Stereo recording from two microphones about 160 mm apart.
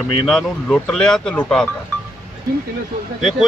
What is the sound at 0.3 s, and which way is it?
Speech, 5° left (ahead or behind).